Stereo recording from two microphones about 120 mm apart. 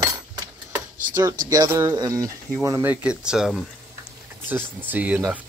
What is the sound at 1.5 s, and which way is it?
Speech, 25° right (ahead or behind).